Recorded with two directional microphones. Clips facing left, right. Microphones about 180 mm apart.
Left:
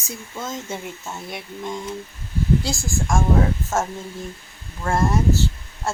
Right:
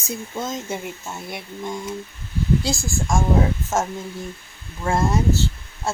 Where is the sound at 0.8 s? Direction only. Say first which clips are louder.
Right 1 dB; 5° right (ahead or behind); by 3.9 s 20° right (ahead or behind).